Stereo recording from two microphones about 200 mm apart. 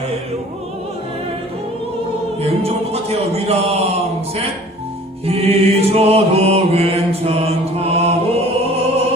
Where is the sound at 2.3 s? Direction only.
30° right (ahead or behind).